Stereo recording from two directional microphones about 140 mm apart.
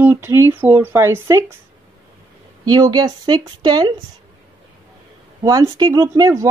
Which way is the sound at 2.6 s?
30° right (ahead or behind).